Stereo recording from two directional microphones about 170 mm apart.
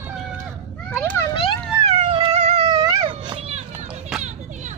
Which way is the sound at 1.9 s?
35° right (ahead or behind).